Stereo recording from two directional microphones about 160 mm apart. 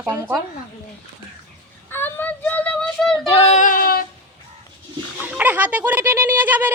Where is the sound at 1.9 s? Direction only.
15° left (ahead or behind).